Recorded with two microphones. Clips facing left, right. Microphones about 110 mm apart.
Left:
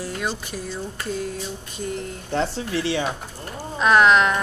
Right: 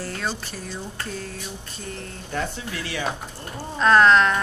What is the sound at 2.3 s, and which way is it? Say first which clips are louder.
Speech: left 5 dB; 30° left (ahead or behind).